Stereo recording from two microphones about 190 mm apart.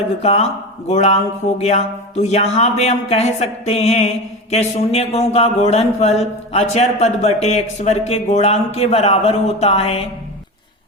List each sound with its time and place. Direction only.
0.2 s speech: 35° left (ahead or behind)